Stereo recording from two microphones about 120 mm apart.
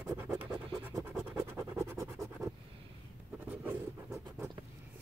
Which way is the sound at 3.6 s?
15° right (ahead or behind).